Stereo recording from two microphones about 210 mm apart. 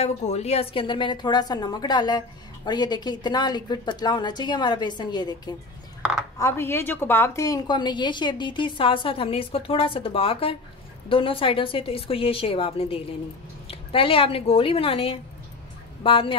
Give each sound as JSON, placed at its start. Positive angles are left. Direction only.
{"t": 0.0, "sound": "a woman's voice", "side_deg": 30}